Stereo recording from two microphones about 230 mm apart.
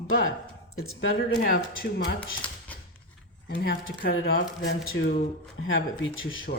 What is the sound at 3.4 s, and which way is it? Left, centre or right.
Speech, left.